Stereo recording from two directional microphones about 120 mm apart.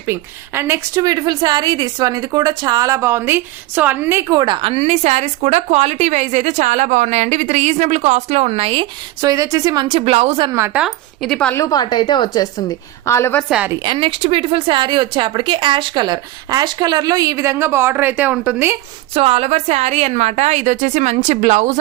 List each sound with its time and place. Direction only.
0.0 s speech: 20° right (ahead or behind)
4.3 s speech: 35° right (ahead or behind)
4.7 s a woman's voice: 65° right (ahead or behind)
9.2 s speech: 30° right (ahead or behind)
9.8 s speech: 50° right (ahead or behind)
10.5 s speech: 20° right (ahead or behind)
10.8 s speech: centre (ahead or behind)
11.5 s a woman's voice: 30° left (ahead or behind)
13.8 s speech: 45° right (ahead or behind); by 18.8 s 15° right (ahead or behind)
19.1 s a woman's voice: 55° right (ahead or behind); by 21.8 s 85° right